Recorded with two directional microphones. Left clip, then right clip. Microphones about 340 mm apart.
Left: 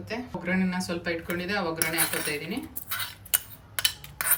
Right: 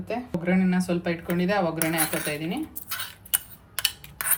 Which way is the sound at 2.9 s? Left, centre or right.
Centre.